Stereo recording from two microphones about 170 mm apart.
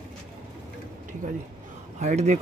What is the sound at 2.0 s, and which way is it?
Speech, 40° right (ahead or behind).